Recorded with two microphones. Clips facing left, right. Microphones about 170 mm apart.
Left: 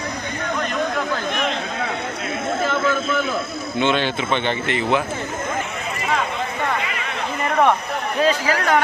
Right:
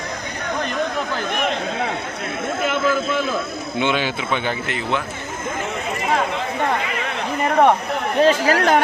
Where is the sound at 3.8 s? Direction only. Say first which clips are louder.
Left 1 dB; 10° right (ahead or behind).